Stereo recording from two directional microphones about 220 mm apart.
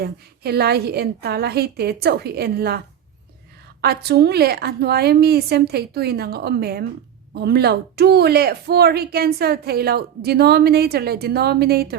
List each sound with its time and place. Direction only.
0.0 s speech: 45° right (ahead or behind)